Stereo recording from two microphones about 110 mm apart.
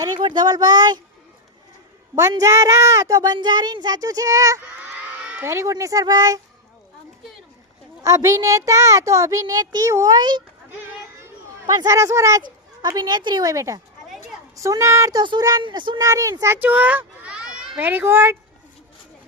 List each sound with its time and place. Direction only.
0.2 s a child's voice: 45° right (ahead or behind)
2.4 s a child's voice: 30° right (ahead or behind)
8.0 s a child's voice: 30° right (ahead or behind)
11.2 s chatter: 30° right (ahead or behind)
12.4 s a child's voice: 40° right (ahead or behind)
15.2 s a child's voice: 40° right (ahead or behind)
16.0 s a child's voice: 30° right (ahead or behind); by 17.7 s 5° right (ahead or behind)
17.7 s speech: 15° right (ahead or behind)